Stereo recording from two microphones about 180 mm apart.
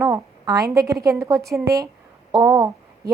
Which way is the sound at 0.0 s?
15° right (ahead or behind).